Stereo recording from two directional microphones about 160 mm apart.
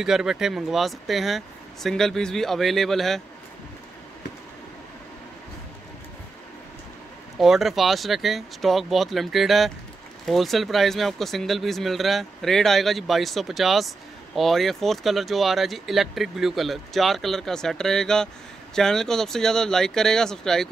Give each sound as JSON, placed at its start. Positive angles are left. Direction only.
{"t": 0.0, "sound": "speech", "side_deg": -5}
{"t": 7.3, "sound": "speech", "side_deg": 0}